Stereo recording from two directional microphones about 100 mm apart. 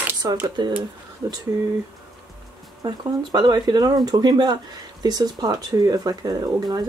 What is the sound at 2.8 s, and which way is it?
Speech, 45° right (ahead or behind).